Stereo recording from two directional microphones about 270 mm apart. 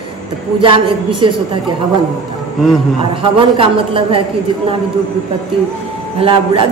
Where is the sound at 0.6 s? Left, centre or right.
Centre.